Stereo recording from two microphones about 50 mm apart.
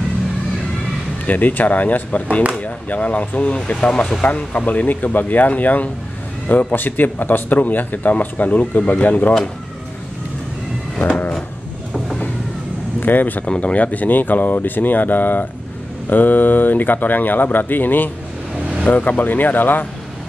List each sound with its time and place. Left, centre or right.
1.2 s speech: left
11.0 s a sound: left
13.0 s speech: left
13.5 s speech: left